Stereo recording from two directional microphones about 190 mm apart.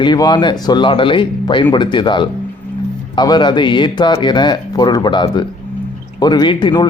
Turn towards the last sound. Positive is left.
turn(degrees=25)  # may be behind; listen again after turning